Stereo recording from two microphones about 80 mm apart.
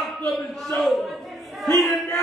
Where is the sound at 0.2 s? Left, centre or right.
Centre.